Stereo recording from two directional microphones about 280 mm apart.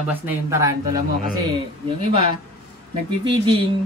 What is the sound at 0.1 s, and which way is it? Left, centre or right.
Speech, centre.